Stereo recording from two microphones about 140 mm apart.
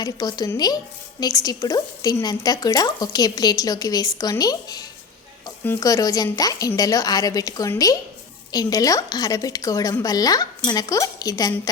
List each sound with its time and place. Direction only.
0.0 s speech: 30° left (ahead or behind)